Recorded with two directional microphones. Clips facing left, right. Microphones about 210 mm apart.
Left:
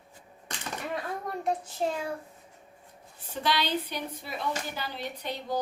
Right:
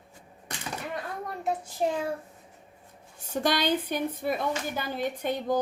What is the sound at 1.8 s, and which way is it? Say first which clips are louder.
Speech: right 3 dB; 15° right (ahead or behind).